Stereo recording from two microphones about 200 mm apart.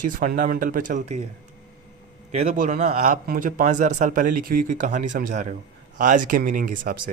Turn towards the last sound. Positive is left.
turn(degrees=-40)  # may be behind; listen again after turning